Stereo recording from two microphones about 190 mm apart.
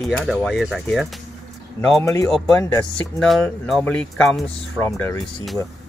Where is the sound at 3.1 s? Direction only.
Centre (ahead or behind).